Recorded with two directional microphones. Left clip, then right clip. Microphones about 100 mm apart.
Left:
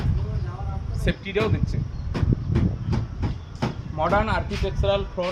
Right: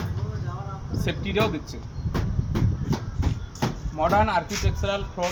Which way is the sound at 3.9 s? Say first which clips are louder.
Right 1 dB; 35° left (ahead or behind).